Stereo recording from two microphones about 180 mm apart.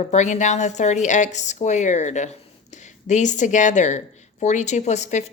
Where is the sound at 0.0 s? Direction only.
40° left (ahead or behind).